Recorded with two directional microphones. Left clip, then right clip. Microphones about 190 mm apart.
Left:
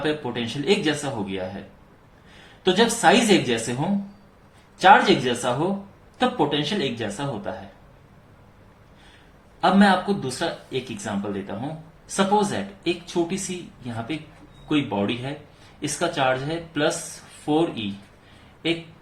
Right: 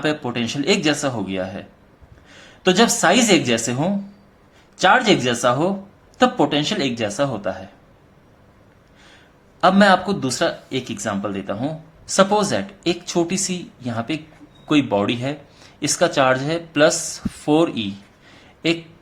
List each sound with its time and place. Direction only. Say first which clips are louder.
0.0 s speech: right 3 dB; 50° right (ahead or behind)
2.6 s speech: right 2 dB; 50° right (ahead or behind)
9.6 s speech: right 5 dB; 55° right (ahead or behind)